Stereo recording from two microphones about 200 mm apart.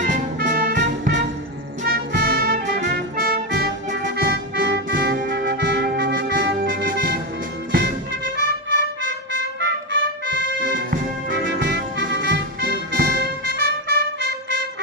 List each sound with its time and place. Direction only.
0.0 s music: 40° right (ahead or behind)
1.8 s music: 55° right (ahead or behind)